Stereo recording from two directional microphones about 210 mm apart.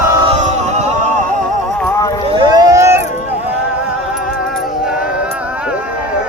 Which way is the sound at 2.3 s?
15° right (ahead or behind).